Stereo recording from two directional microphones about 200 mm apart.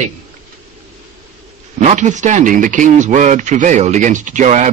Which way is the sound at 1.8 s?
35° right (ahead or behind).